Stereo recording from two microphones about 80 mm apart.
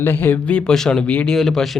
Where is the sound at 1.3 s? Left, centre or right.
Centre.